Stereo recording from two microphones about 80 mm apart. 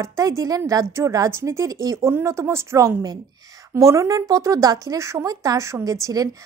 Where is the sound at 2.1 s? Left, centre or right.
Right.